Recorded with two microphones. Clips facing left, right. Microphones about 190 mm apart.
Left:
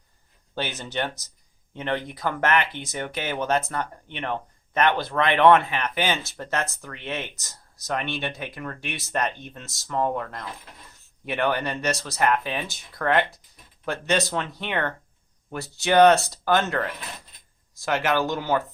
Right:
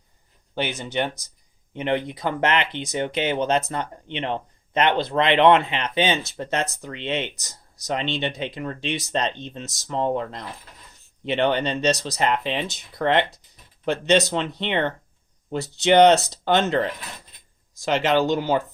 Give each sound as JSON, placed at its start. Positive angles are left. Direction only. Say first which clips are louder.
{"t": 0.5, "sound": "speech", "louder": "right 4 dB", "side_deg": -15}